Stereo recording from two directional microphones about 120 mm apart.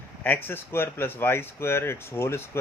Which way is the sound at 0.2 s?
15° left (ahead or behind).